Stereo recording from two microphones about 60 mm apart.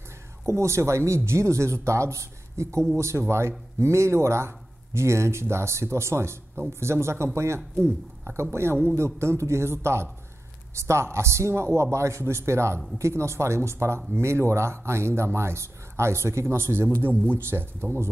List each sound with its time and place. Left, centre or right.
0.5 s speech: right